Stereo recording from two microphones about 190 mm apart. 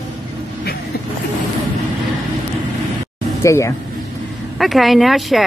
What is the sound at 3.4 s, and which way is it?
Speech, 15° left (ahead or behind).